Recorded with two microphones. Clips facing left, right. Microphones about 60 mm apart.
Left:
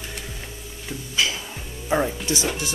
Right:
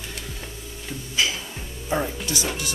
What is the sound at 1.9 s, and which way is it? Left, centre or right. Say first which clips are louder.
Speech: left 3 dB; centre.